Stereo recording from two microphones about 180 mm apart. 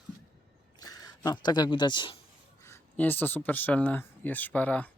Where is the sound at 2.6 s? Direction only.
10° left (ahead or behind).